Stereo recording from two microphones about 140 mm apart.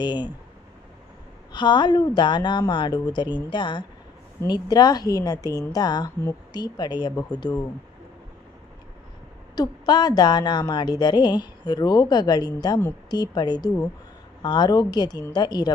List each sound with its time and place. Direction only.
0.0 s a woman's voice: 30° left (ahead or behind)
1.5 s a woman's voice: 35° left (ahead or behind)
9.6 s a woman's voice: 30° left (ahead or behind)